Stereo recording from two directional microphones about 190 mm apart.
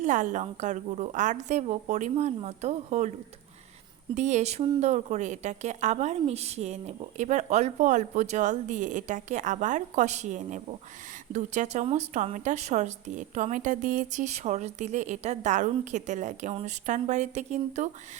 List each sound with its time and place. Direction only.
0.0 s a woman's voice: 40° right (ahead or behind)
4.1 s a woman's voice: 40° right (ahead or behind)